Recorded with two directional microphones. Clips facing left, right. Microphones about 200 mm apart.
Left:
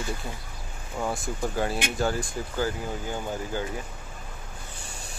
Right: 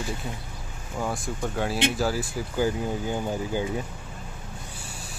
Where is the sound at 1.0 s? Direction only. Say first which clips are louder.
Even; centre (ahead or behind).